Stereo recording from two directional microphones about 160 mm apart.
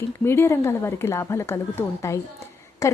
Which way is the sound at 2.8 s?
20° left (ahead or behind).